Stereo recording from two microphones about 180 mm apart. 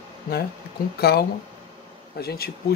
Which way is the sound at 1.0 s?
60° left (ahead or behind).